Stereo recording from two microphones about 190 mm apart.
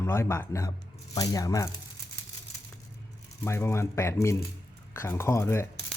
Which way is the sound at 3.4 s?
15° left (ahead or behind).